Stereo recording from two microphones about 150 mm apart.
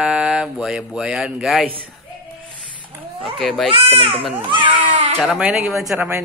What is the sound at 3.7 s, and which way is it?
Speech, 35° right (ahead or behind).